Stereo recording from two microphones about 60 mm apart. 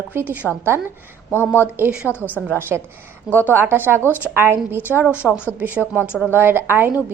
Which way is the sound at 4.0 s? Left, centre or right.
Left.